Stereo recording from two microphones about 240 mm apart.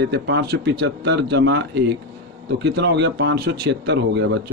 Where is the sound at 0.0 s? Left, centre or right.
Right.